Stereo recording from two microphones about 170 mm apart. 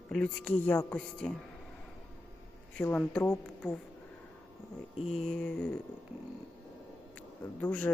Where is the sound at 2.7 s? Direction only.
10° left (ahead or behind).